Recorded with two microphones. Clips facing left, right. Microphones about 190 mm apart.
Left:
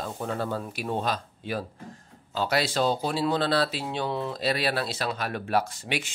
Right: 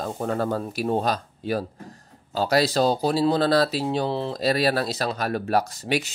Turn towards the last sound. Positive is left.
turn(degrees=-40)  # may be behind; listen again after turning